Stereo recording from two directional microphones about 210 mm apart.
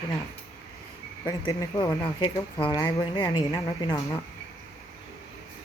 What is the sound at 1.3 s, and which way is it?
A woman's voice, 15° left (ahead or behind).